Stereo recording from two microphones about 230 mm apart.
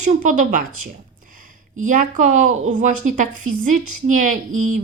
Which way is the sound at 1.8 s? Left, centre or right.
Right.